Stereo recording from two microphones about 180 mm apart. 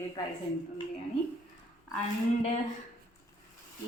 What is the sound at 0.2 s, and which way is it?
Speech, 20° left (ahead or behind).